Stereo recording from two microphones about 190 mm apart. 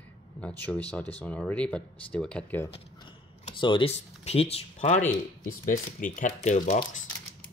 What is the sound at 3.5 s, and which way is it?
Speech, 25° left (ahead or behind).